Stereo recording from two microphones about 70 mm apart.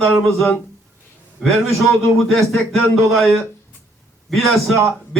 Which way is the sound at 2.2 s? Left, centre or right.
Centre.